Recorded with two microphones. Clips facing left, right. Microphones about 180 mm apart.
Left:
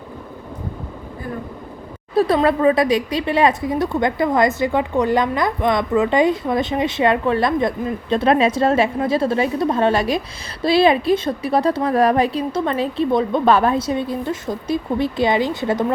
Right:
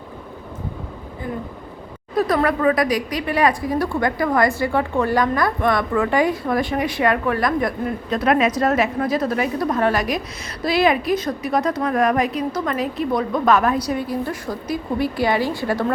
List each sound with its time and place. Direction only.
2.1 s speech: 30° left (ahead or behind)